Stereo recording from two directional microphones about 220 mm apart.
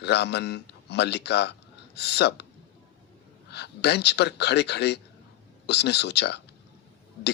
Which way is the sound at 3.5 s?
50° left (ahead or behind).